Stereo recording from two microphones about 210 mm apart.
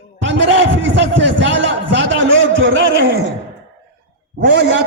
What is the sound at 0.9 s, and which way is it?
A man's voice, 60° right (ahead or behind).